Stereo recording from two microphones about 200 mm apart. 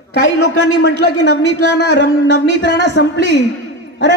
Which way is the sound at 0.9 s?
60° right (ahead or behind).